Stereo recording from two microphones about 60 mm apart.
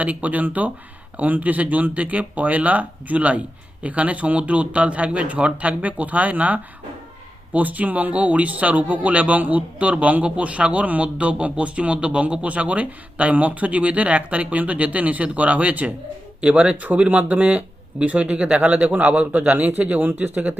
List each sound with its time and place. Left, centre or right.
0.0 s speech: right